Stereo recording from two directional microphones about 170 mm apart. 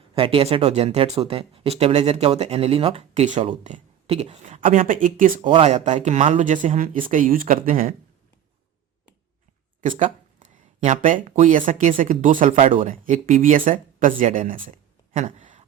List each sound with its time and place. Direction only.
0.1 s speech: 35° right (ahead or behind); by 5.3 s 50° right (ahead or behind)
5.4 s speech: 30° right (ahead or behind)
6.1 s speech: 40° right (ahead or behind)
10.0 s speech: 45° right (ahead or behind)
15.1 s a sound: 45° right (ahead or behind)